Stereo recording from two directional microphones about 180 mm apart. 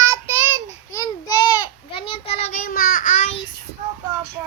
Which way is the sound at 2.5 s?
50° left (ahead or behind).